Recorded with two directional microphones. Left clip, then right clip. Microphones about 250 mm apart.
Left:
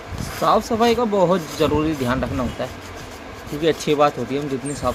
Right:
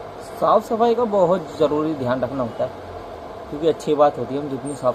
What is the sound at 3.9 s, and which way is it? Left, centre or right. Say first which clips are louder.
Speech: right 2 dB; left.